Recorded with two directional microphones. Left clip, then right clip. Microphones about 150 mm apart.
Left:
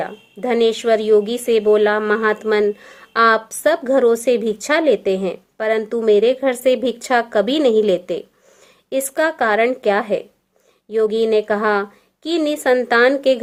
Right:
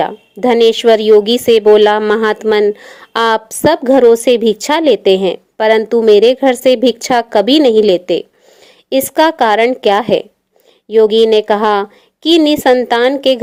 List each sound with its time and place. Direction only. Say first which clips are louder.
0.0 s a woman's voice: right 10 dB; 45° right (ahead or behind)